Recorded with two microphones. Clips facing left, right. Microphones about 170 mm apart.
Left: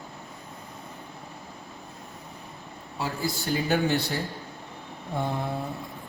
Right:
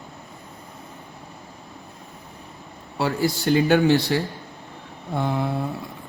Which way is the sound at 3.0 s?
70° right (ahead or behind).